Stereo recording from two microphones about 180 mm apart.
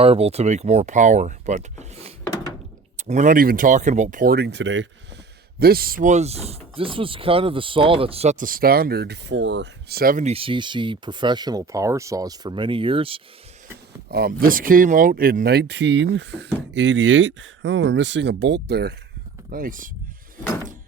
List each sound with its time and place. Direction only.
0.0 s speech: 35° right (ahead or behind); by 4.9 s 90° right
5.5 s speech: 60° right (ahead or behind)
10.2 s speech: 30° right (ahead or behind)
14.1 s speech: 55° right (ahead or behind)
19.5 s speech: 50° right (ahead or behind)